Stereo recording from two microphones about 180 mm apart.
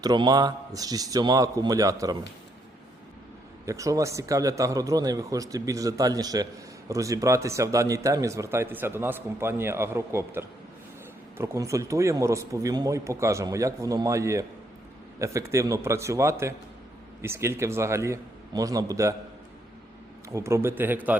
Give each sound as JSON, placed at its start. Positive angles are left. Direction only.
{"t": 0.0, "sound": "a man's voice", "side_deg": -20}
{"t": 3.7, "sound": "speech", "side_deg": -20}
{"t": 20.3, "sound": "speech", "side_deg": -15}